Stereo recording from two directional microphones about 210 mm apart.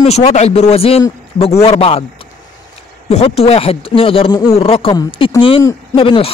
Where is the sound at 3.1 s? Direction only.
30° left (ahead or behind).